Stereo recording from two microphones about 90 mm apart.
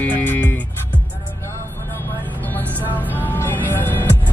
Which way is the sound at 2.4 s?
20° left (ahead or behind).